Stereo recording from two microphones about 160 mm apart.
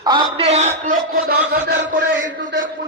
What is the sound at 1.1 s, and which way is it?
Chant, 75° right (ahead or behind).